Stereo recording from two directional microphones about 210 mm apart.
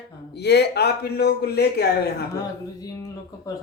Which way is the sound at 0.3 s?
50° left (ahead or behind).